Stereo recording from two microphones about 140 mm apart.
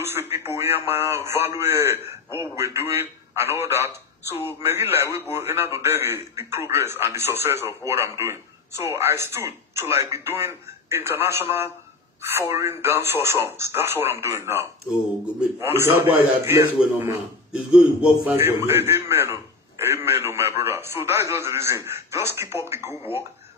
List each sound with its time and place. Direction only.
0.0 s radio: 15° right (ahead or behind)
0.7 s a man's voice: 15° right (ahead or behind)
17.5 s a man's voice: 5° right (ahead or behind)